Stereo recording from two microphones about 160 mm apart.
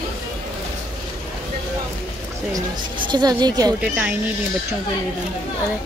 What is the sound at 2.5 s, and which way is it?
A woman's voice, 30° right (ahead or behind).